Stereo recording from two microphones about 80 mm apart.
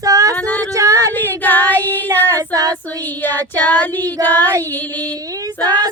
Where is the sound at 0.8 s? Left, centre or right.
Right.